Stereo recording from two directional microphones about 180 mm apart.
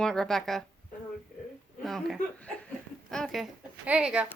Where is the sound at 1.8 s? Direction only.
Centre (ahead or behind).